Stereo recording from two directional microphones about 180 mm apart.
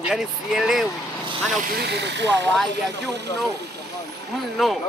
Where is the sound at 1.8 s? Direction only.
70° right (ahead or behind).